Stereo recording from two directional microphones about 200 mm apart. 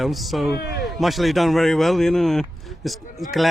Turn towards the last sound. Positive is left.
turn(degrees=0)  # may be behind; listen again after turning